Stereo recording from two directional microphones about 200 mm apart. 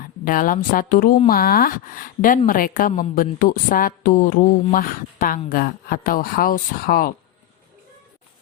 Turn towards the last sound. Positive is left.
turn(degrees=45)  # may be behind; listen again after turning